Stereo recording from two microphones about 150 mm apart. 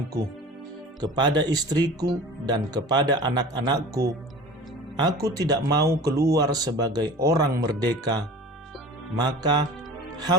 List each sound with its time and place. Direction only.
1.0 s speech: 30° right (ahead or behind)